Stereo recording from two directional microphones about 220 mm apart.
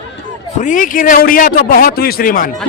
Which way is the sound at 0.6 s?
35° left (ahead or behind).